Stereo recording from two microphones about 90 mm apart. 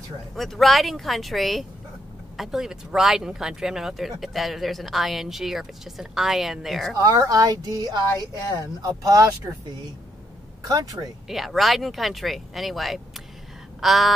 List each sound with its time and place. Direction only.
0.4 s speech: centre (ahead or behind)
7.0 s speech: 45° right (ahead or behind)
10.6 s speech: 45° right (ahead or behind)
11.2 s speech: centre (ahead or behind)
13.7 s a sound: centre (ahead or behind)